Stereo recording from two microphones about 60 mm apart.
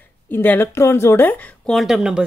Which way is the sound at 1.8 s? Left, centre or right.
Centre.